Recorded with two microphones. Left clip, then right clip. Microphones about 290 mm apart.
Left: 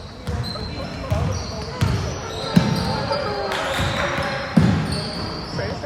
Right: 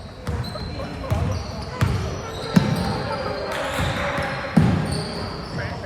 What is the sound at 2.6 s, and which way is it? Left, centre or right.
Basketball bounce, centre.